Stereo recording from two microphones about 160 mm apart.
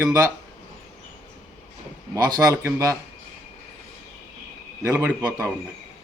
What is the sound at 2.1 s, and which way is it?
Speech, 20° right (ahead or behind).